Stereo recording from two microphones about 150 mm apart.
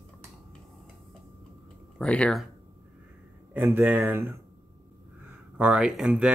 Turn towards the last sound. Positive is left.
turn(degrees=-5)  # may be behind; listen again after turning